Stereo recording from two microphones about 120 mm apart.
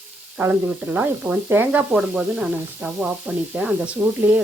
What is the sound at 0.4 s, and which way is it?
Sizzle, 15° right (ahead or behind).